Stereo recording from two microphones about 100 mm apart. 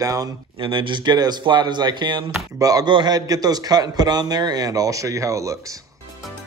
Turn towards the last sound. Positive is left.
turn(degrees=-30)  # may be behind; listen again after turning